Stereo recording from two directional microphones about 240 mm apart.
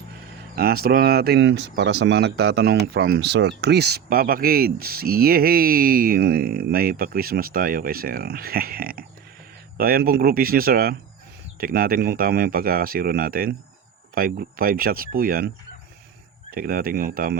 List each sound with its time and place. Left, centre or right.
0.5 s speech: right
16.5 s speech: right